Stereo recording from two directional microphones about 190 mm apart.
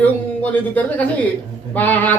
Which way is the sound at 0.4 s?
10° left (ahead or behind).